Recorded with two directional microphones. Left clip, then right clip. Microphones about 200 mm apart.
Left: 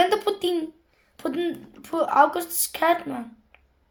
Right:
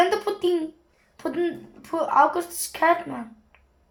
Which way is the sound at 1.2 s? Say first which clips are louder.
Right 1 dB; 45° left (ahead or behind).